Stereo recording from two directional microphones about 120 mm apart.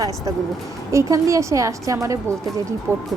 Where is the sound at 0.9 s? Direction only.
25° right (ahead or behind).